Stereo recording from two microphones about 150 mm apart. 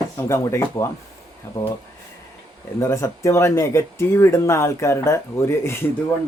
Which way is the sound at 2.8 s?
20° left (ahead or behind).